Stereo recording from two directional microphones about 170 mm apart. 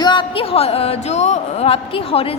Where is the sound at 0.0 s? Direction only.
25° left (ahead or behind).